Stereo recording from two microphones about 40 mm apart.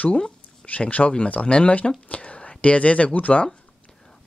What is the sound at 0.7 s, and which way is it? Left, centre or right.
Speech, left.